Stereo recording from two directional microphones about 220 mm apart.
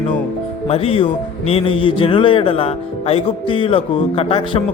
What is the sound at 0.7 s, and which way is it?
Speech, 25° left (ahead or behind).